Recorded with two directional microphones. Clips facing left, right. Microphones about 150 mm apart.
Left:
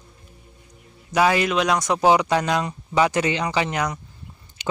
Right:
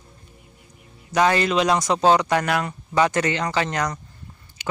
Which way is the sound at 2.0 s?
15° left (ahead or behind).